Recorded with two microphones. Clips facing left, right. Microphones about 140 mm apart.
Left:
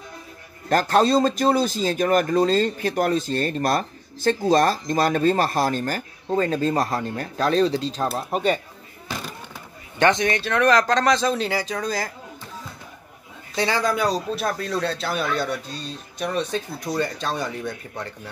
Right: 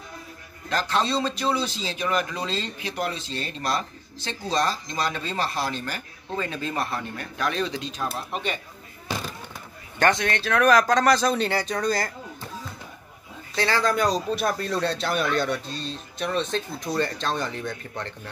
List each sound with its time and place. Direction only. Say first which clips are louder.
0.7 s speech: left 7 dB; 50° left (ahead or behind)
10.0 s speech: left 3 dB; 15° left (ahead or behind)
10.4 s speech: right 1 dB; 5° right (ahead or behind)
13.6 s speech: left 1 dB; 15° left (ahead or behind)